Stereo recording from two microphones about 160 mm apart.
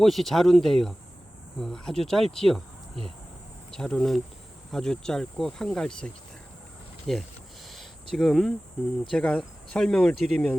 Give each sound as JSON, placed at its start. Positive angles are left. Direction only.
{"t": 0.0, "sound": "speech", "side_deg": 0}
{"t": 7.1, "sound": "speech", "side_deg": 0}
{"t": 7.7, "sound": "a sound", "side_deg": 0}
{"t": 9.0, "sound": "speech", "side_deg": 5}